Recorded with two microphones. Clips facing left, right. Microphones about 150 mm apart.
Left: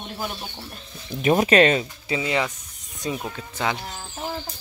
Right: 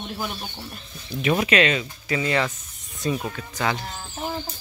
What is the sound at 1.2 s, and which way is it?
Speech, 40° left (ahead or behind).